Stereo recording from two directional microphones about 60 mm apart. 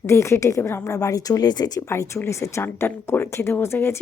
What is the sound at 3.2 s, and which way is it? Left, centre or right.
Speech, left.